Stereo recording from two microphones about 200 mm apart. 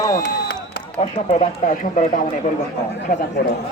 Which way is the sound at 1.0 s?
30° left (ahead or behind).